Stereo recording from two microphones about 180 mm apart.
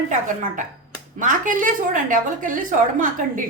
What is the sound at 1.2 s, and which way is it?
A woman's voice, 45° right (ahead or behind).